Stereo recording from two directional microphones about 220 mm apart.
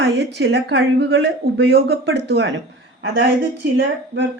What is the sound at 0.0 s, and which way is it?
A woman's voice, 55° right (ahead or behind).